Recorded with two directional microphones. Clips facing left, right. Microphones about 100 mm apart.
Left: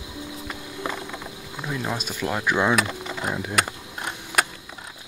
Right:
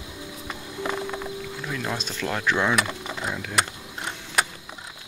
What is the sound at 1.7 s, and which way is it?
Speech, 10° left (ahead or behind).